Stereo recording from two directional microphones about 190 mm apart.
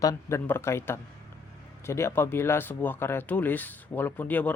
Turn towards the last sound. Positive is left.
turn(degrees=10)  # may be behind; listen again after turning